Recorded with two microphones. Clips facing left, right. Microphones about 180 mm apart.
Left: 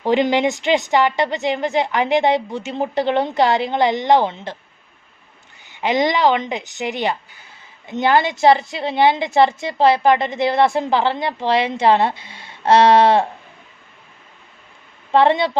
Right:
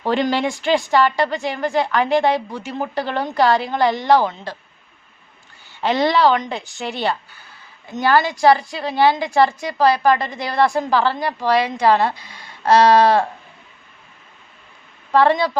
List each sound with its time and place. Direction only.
0.0 s a woman's voice: 20° left (ahead or behind)
5.6 s a woman's voice: 15° left (ahead or behind)
15.1 s a woman's voice: 25° left (ahead or behind)